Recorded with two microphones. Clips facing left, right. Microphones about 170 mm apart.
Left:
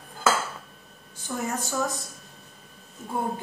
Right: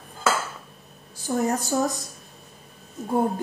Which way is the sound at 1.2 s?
40° right (ahead or behind).